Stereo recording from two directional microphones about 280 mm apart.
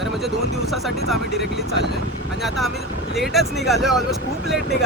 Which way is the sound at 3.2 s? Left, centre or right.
Centre.